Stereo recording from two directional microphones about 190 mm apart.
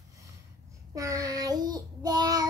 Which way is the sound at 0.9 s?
20° right (ahead or behind).